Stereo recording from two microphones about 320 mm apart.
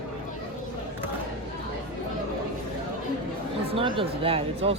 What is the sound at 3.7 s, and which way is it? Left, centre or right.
Speech, centre.